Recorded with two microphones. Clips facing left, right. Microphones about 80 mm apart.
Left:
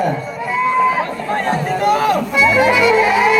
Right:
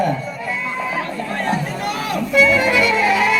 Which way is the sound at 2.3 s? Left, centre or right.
Centre.